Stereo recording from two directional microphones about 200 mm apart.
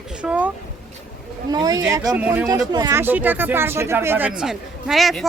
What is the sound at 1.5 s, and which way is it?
Speech, 20° right (ahead or behind).